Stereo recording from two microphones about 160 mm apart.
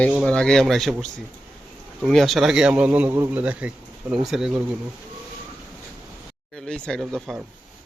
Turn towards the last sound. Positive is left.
turn(degrees=0)  # may be behind; listen again after turning